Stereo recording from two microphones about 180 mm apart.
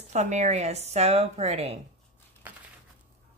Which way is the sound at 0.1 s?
40° right (ahead or behind).